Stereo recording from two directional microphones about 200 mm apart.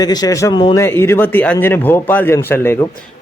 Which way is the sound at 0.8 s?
10° left (ahead or behind).